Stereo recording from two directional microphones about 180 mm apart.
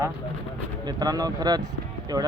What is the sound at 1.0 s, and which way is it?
Speech, 20° right (ahead or behind).